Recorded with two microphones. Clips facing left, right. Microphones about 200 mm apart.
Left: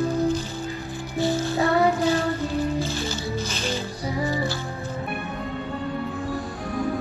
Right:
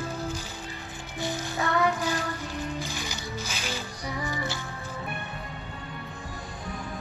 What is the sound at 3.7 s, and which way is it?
Music, 35° left (ahead or behind).